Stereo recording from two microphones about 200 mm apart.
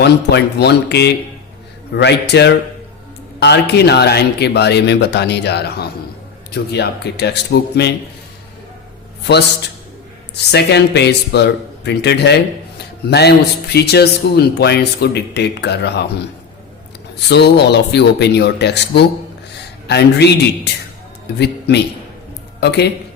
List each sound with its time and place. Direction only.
0.0 s a man's voice: 55° left (ahead or behind)
10.3 s a man's voice: 55° left (ahead or behind)
17.2 s a man's voice: 55° left (ahead or behind)